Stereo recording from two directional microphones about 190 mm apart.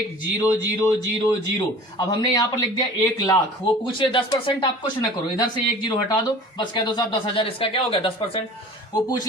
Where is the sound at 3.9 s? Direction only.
25° left (ahead or behind).